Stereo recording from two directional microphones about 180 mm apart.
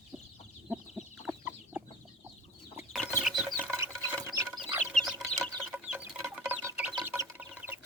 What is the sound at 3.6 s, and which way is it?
Water, 15° right (ahead or behind).